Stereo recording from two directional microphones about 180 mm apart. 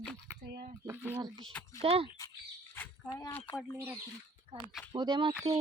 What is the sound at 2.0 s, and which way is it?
Speech, 20° left (ahead or behind).